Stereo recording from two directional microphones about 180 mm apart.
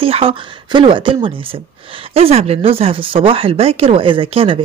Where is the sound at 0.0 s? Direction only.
30° right (ahead or behind).